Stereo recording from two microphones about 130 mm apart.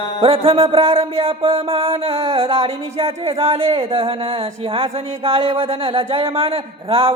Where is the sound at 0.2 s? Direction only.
45° right (ahead or behind).